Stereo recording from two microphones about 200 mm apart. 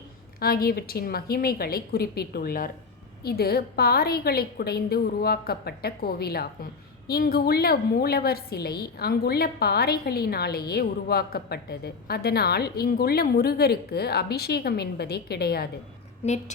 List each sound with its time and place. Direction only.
0.3 s a woman's voice: 50° left (ahead or behind)